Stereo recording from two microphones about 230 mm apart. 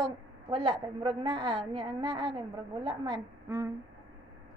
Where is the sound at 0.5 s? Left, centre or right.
Right.